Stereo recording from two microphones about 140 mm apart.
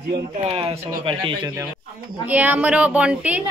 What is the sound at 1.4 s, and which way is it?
Speech, 20° right (ahead or behind).